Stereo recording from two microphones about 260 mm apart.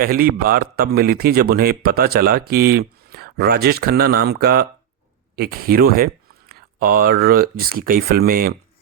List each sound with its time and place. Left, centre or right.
0.0 s speech: right